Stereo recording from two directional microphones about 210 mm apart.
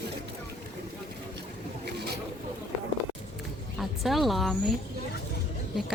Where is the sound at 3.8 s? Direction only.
Centre (ahead or behind).